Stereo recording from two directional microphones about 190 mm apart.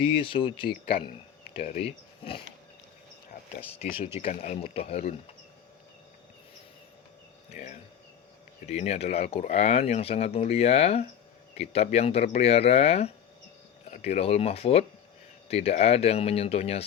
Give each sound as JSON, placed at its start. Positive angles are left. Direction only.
{"t": 0.0, "sound": "speech", "side_deg": 30}
{"t": 4.2, "sound": "speech", "side_deg": 35}
{"t": 7.5, "sound": "speech", "side_deg": 40}